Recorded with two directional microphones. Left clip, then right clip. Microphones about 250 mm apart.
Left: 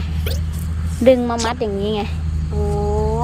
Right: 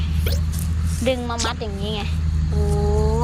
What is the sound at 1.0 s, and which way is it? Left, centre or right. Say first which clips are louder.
Speech: left 8 dB; left.